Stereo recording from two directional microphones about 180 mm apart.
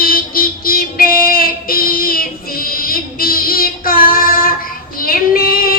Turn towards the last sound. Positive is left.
turn(degrees=55)  # may be behind; listen again after turning